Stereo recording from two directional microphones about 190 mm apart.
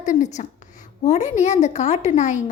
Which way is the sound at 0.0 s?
40° left (ahead or behind).